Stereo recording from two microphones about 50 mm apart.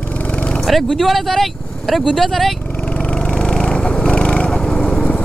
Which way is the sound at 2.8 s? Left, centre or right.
Centre.